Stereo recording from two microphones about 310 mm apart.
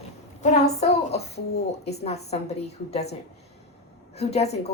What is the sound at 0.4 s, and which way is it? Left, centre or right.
A child's voice, left.